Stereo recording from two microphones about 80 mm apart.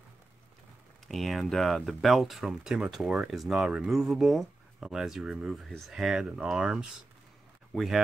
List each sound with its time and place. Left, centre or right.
1.0 s speech: centre